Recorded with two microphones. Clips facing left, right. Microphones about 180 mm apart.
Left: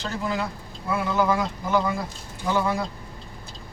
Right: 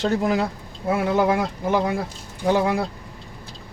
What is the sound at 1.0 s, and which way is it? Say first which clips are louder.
Speech: right 3 dB; 55° right (ahead or behind).